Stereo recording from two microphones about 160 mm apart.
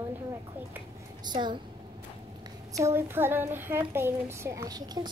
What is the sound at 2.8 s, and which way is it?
A child's voice, 15° right (ahead or behind).